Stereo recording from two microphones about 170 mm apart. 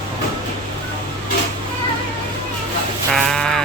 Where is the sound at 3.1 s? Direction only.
5° left (ahead or behind).